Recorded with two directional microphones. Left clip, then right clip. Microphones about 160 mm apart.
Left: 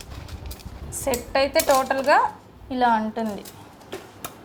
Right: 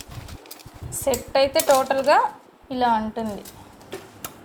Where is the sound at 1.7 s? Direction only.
15° right (ahead or behind).